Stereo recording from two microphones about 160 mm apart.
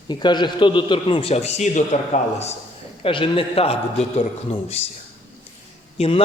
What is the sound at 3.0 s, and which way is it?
A man's voice, 35° left (ahead or behind).